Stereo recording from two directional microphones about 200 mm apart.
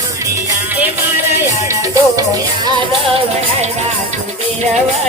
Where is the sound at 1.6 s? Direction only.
15° right (ahead or behind).